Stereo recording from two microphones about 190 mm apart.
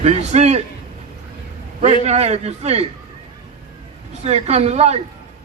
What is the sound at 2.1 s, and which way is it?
Speech, 35° right (ahead or behind).